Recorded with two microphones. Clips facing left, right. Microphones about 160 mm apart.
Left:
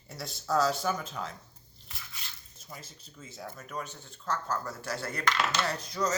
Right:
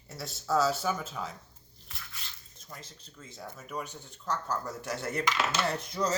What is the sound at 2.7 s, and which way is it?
Speech, 5° left (ahead or behind).